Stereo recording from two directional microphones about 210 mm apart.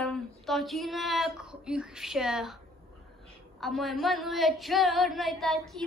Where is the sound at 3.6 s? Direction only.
Centre (ahead or behind).